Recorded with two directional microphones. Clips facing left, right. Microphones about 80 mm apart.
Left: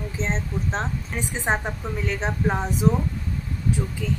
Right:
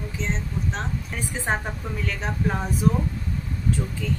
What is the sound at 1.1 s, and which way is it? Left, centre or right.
A woman's voice, centre.